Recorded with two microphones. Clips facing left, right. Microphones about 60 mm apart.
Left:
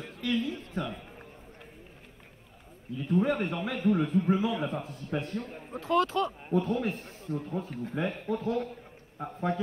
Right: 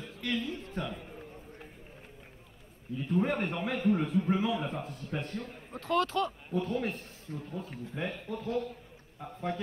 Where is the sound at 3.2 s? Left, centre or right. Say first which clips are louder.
Left 2 dB; right.